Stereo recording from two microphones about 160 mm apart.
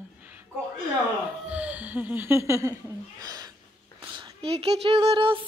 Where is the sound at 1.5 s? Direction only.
10° right (ahead or behind).